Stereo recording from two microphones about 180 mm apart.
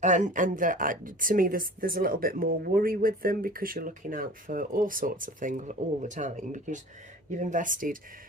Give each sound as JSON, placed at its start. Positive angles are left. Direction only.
{"t": 0.0, "sound": "speech", "side_deg": -45}